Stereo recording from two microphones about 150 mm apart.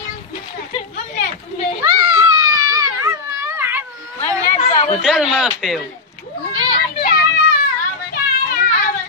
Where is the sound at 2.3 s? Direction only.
25° right (ahead or behind).